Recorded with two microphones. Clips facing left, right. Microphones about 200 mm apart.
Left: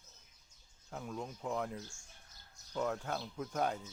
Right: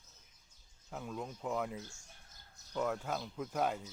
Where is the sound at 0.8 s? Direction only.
Centre (ahead or behind).